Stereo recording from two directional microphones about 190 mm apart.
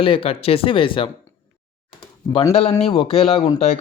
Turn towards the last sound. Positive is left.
turn(degrees=35)  # may be behind; listen again after turning